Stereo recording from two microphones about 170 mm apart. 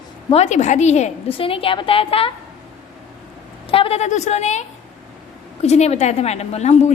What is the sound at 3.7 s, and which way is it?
A woman's voice, 35° left (ahead or behind).